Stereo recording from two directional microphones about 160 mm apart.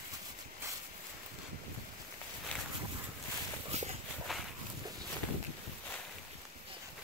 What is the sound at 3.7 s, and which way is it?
Walk, 40° right (ahead or behind).